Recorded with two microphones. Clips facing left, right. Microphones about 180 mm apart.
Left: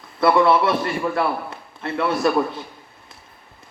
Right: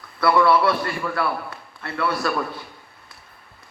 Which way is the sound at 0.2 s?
20° left (ahead or behind).